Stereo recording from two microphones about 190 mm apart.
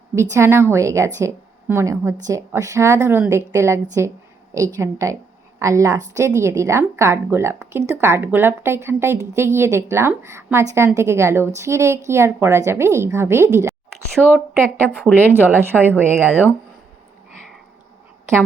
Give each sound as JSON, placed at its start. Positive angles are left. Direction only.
{"t": 0.2, "sound": "a woman's voice", "side_deg": -15}
{"t": 14.2, "sound": "a woman's voice", "side_deg": 10}
{"t": 15.1, "sound": "a woman's voice", "side_deg": -10}